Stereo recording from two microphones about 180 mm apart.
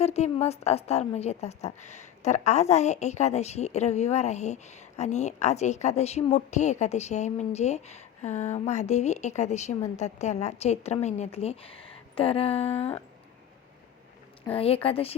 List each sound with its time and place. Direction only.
0.0 s a woman's voice: 35° left (ahead or behind)
14.5 s a woman's voice: 30° left (ahead or behind)